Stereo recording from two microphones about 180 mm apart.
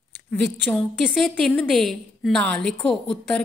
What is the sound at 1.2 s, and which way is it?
A woman's voice, 5° left (ahead or behind).